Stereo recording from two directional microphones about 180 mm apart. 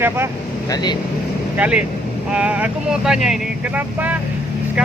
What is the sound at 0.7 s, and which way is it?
Speech, 25° left (ahead or behind).